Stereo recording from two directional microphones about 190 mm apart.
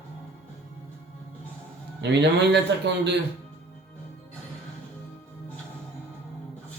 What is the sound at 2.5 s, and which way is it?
Speech, 65° right (ahead or behind).